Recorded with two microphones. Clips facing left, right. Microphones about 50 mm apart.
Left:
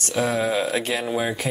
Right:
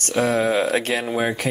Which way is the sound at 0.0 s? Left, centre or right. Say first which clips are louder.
Right 3 dB; right.